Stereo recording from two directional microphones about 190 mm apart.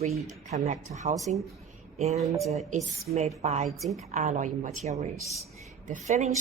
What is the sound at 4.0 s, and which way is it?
A woman's voice, 35° right (ahead or behind).